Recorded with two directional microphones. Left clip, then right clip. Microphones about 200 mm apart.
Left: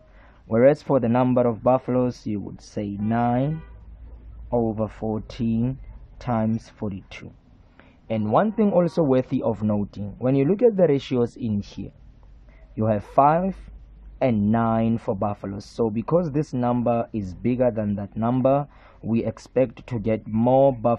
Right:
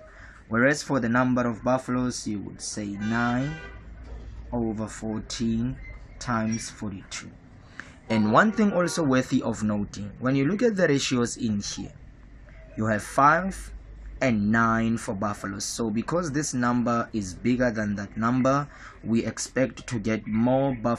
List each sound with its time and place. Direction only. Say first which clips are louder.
0.5 s a man's voice: left 6 dB; 25° left (ahead or behind)
4.5 s speech: left 7 dB; 30° left (ahead or behind)
7.7 s a man's voice: right 1 dB; 15° left (ahead or behind)